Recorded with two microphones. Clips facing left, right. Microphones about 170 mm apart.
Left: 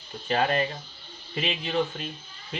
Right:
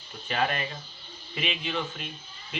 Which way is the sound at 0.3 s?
35° left (ahead or behind).